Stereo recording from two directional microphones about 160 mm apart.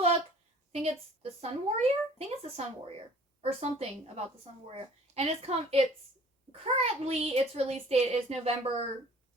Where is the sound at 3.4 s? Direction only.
40° right (ahead or behind).